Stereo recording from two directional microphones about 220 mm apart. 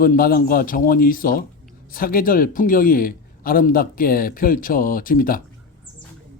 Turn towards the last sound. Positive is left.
turn(degrees=40)  # may be behind; listen again after turning